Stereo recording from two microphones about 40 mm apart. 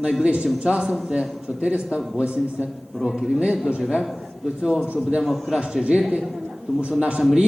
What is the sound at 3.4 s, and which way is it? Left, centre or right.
Speech, right.